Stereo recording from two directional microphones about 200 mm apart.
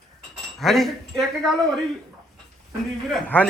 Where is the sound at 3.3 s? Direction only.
10° left (ahead or behind).